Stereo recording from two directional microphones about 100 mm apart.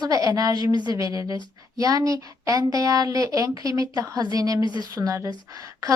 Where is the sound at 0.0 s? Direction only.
40° right (ahead or behind).